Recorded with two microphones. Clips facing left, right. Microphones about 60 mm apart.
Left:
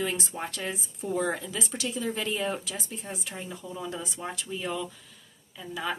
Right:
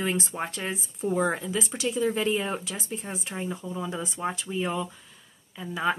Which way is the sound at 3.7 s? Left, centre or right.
Centre.